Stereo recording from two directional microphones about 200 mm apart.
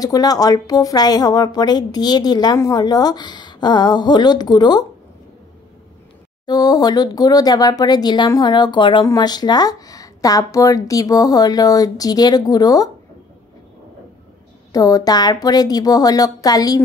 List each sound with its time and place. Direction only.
0.0 s speech: 20° left (ahead or behind)
6.4 s speech: 20° left (ahead or behind)
14.7 s speech: 15° left (ahead or behind)